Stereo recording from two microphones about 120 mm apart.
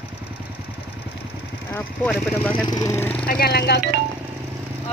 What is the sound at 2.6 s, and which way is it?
Speech, 30° left (ahead or behind).